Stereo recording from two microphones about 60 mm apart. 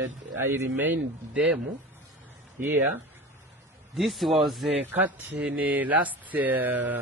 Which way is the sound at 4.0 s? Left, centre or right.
Centre.